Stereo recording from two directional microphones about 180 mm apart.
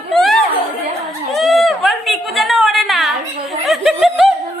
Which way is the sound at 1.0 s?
Centre (ahead or behind).